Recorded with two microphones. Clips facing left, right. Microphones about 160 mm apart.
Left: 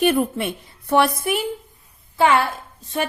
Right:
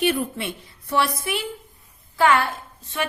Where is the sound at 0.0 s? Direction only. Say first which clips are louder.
Left 4 dB; 50° left (ahead or behind).